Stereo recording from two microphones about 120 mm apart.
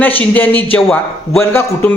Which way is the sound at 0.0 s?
15° left (ahead or behind).